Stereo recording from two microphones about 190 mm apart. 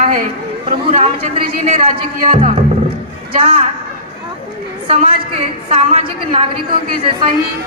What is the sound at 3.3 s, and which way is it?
Speech, 30° right (ahead or behind).